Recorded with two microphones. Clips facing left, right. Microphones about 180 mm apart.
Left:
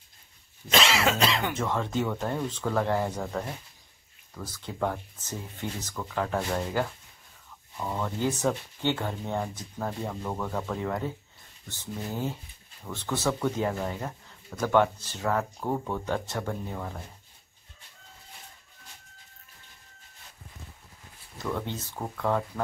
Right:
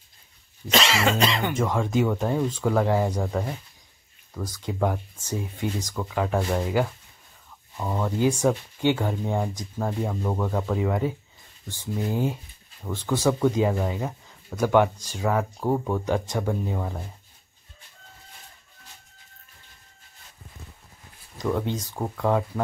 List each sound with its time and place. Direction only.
0.7 s cough: 5° left (ahead or behind)
1.5 s speech: 10° right (ahead or behind)
21.4 s speech: 15° right (ahead or behind)